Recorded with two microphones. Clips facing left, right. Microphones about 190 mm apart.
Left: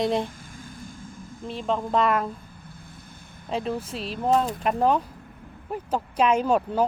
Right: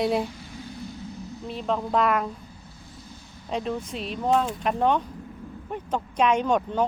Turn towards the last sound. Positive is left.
turn(degrees=5)  # may be behind; listen again after turning